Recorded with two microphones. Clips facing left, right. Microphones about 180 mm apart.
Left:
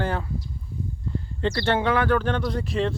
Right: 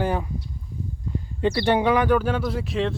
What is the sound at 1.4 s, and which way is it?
Speech, 10° right (ahead or behind).